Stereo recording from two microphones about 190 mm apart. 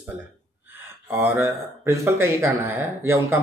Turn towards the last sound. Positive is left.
turn(degrees=-10)  # may be behind; listen again after turning